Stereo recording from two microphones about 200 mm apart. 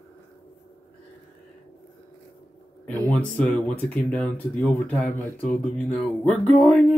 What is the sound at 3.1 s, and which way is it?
Speech, 5° left (ahead or behind).